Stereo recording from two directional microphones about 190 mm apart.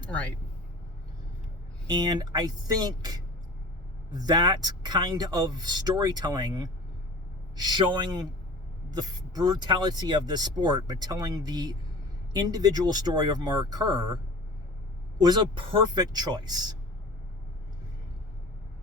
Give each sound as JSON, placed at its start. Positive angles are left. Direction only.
{"t": 0.0, "sound": "speech", "side_deg": 5}
{"t": 1.9, "sound": "speech", "side_deg": -20}
{"t": 15.2, "sound": "speech", "side_deg": -25}